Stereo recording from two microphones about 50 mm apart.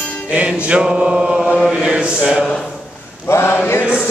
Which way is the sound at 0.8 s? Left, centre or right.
Centre.